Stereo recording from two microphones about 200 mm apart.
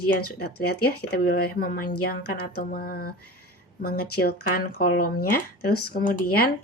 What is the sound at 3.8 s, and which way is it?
A woman's voice, 50° left (ahead or behind).